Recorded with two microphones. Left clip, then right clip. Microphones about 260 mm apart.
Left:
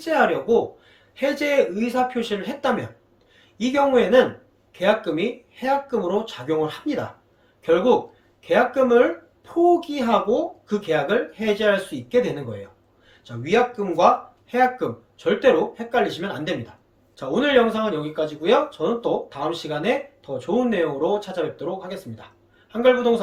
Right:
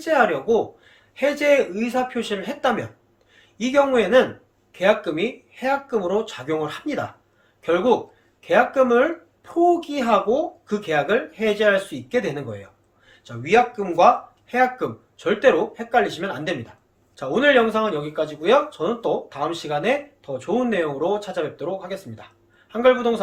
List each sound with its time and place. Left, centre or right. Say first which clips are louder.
0.0 s speech: right 1 dB; centre